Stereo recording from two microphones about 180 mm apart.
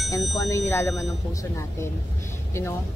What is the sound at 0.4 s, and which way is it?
Speech, 15° left (ahead or behind).